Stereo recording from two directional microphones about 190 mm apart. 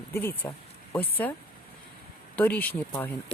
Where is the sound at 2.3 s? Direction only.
10° left (ahead or behind).